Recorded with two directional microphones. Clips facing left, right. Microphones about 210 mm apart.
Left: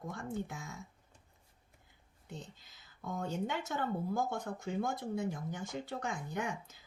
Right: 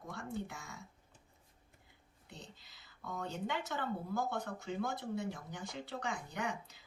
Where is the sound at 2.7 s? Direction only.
45° left (ahead or behind).